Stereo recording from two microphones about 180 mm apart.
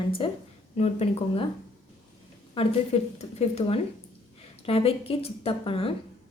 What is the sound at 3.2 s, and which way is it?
A woman's voice, 35° left (ahead or behind).